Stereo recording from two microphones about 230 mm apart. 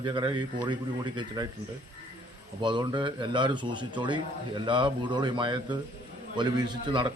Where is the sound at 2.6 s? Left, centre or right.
Centre.